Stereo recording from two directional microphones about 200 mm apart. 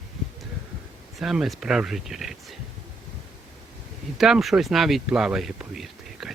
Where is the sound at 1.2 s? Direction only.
Centre (ahead or behind).